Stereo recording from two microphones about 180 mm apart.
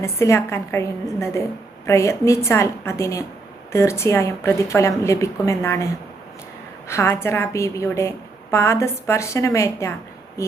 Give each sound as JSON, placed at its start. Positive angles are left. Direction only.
{"t": 0.0, "sound": "a woman's voice", "side_deg": 15}
{"t": 1.9, "sound": "a woman's voice", "side_deg": 15}